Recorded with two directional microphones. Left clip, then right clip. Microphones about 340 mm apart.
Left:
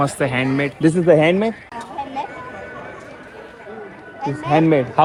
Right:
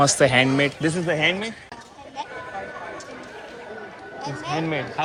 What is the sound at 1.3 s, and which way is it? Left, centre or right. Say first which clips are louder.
Speech: left 7 dB; left.